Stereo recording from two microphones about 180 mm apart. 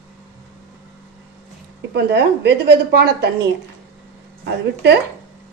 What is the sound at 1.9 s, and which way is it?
A woman's voice, 70° right (ahead or behind).